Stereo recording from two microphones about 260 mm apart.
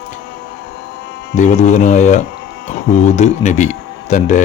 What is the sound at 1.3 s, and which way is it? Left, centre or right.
A man's voice, left.